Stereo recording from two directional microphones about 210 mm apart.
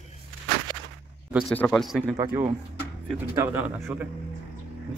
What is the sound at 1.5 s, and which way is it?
Speech, 5° left (ahead or behind).